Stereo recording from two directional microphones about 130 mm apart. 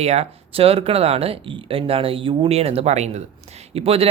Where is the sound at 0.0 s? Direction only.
55° right (ahead or behind).